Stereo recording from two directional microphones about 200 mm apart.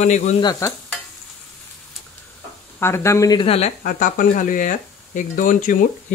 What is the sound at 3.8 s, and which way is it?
Cutlery, 40° left (ahead or behind).